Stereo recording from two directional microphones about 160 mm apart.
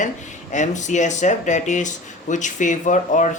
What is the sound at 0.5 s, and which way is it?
Speech, 50° left (ahead or behind).